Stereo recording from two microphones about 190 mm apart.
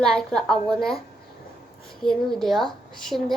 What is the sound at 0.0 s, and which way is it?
A woman's voice, 5° left (ahead or behind).